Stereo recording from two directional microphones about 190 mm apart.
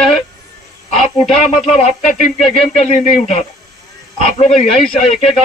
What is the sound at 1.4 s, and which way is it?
Speech, 35° left (ahead or behind).